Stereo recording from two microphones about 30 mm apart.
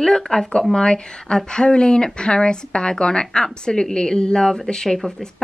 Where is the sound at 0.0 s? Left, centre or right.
Centre.